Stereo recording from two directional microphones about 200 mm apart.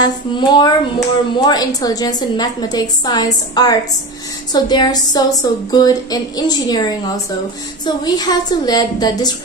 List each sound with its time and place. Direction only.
0.0 s speech: 20° left (ahead or behind)